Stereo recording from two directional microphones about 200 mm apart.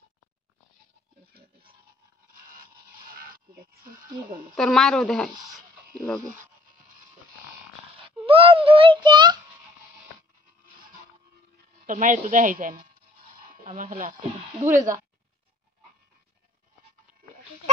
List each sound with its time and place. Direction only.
4.6 s speech: centre (ahead or behind)
8.3 s a child's voice: 25° right (ahead or behind)
11.8 s speech: 40° right (ahead or behind)